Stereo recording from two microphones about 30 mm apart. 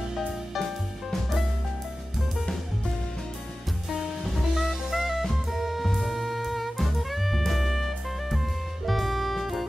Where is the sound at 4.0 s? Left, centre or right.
Centre.